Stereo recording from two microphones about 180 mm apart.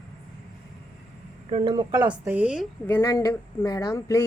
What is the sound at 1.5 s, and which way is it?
Speech, 25° right (ahead or behind).